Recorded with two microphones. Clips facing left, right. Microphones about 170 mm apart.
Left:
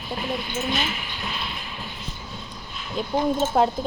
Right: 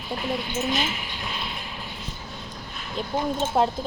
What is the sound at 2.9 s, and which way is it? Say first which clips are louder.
Speech: left 4 dB; centre (ahead or behind).